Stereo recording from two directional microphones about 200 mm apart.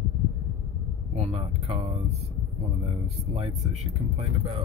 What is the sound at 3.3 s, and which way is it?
Speech, 30° right (ahead or behind).